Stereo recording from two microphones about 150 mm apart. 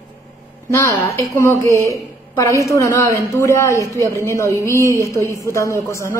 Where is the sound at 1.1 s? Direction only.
20° left (ahead or behind).